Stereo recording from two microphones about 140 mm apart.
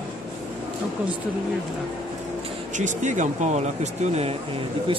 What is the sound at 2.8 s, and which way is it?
Speech, 60° right (ahead or behind).